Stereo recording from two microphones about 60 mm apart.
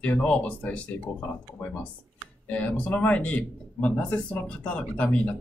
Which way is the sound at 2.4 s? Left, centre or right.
Left.